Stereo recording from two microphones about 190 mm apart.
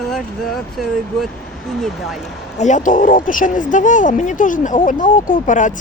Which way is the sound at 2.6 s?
40° left (ahead or behind).